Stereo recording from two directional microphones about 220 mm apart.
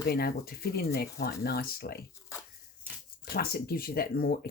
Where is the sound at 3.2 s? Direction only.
45° left (ahead or behind).